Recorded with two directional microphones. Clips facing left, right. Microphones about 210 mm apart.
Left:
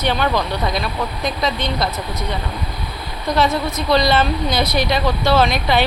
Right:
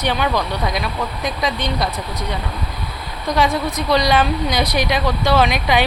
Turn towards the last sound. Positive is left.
turn(degrees=-15)  # may be behind; listen again after turning